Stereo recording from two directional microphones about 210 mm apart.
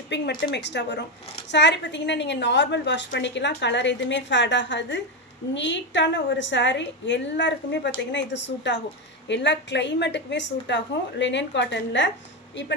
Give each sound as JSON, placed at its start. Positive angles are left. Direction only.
{"t": 0.1, "sound": "a woman's voice", "side_deg": 55}